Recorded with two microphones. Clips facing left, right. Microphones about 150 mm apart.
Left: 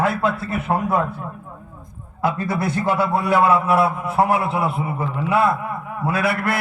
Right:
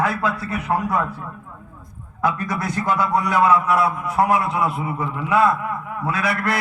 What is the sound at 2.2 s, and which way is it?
A man's voice, 30° left (ahead or behind).